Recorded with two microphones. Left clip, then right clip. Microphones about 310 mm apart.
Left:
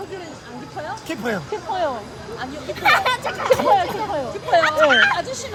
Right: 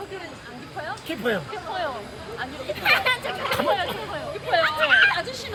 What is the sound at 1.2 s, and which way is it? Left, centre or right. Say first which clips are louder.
Speech: even; centre.